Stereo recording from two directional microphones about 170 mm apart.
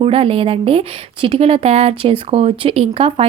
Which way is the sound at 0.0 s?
35° right (ahead or behind).